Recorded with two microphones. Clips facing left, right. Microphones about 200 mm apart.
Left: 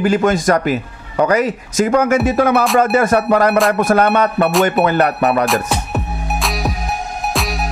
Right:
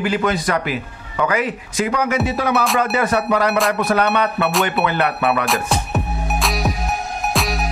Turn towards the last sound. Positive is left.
turn(degrees=0)  # may be behind; listen again after turning